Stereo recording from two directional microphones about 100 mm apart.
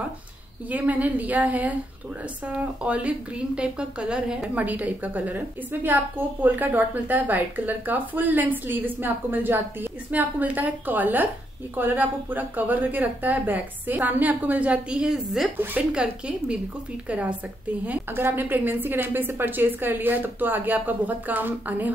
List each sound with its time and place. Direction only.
0.7 s a woman's voice: 15° right (ahead or behind)
17.8 s a woman's voice: 20° right (ahead or behind)